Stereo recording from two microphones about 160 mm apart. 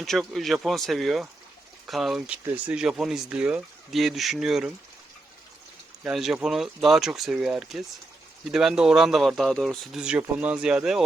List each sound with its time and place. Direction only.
0.0 s speech: centre (ahead or behind)
2.4 s speech: 20° right (ahead or behind)
2.7 s speech: 5° right (ahead or behind)
6.0 s speech: 5° right (ahead or behind)